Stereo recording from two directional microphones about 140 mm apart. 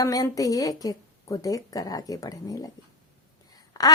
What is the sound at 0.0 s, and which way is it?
A woman's voice, 25° left (ahead or behind).